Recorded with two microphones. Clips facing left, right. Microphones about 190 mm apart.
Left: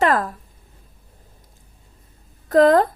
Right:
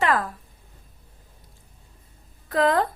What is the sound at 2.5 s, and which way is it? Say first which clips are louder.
Speech: left 8 dB; 45° left (ahead or behind).